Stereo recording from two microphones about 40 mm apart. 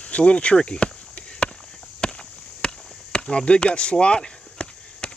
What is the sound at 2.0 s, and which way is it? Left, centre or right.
Chop, left.